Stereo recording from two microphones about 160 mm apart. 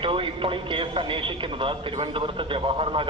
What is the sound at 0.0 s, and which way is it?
A man's voice, 35° right (ahead or behind).